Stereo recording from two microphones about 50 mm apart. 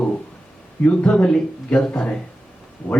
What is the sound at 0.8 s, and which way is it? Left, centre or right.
A man's voice, left.